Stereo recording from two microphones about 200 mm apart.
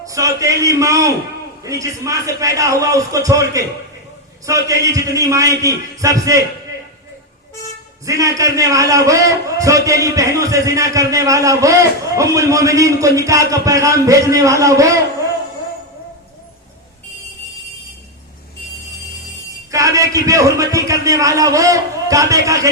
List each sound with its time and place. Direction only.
0.0 s a man's voice: 15° right (ahead or behind)
8.0 s a man's voice: 15° right (ahead or behind)
19.7 s a man's voice: 15° right (ahead or behind)